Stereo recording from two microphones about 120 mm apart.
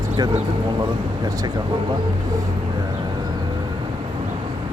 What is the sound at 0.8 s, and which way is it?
Speech, 30° right (ahead or behind).